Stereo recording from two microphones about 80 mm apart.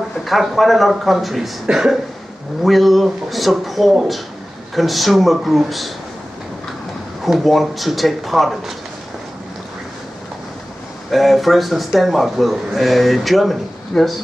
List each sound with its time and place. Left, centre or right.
0.2 s a man's voice: centre
7.2 s a man's voice: centre
11.1 s a man's voice: centre